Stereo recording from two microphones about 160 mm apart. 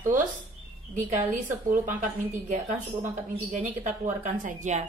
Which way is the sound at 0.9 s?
55° right (ahead or behind).